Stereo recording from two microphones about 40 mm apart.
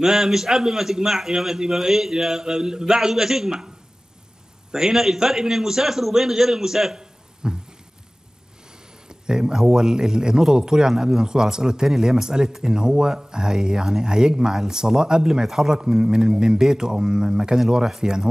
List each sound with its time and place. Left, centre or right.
0.0 s speech: centre
9.1 s speech: centre